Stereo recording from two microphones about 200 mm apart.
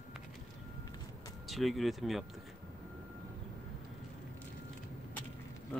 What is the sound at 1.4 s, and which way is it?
Speech, centre (ahead or behind).